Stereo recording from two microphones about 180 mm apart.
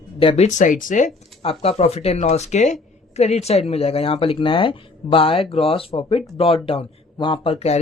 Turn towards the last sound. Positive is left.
turn(degrees=35)  # may be behind; listen again after turning